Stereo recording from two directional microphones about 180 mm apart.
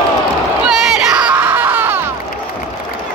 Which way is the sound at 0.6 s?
5° right (ahead or behind).